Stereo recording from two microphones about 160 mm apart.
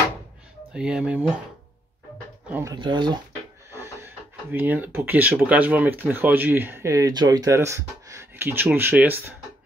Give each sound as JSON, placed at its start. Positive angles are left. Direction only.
{"t": 0.7, "sound": "speech", "side_deg": -5}
{"t": 2.5, "sound": "speech", "side_deg": -20}
{"t": 2.8, "sound": "speech", "side_deg": -30}
{"t": 3.7, "sound": "speech", "side_deg": -15}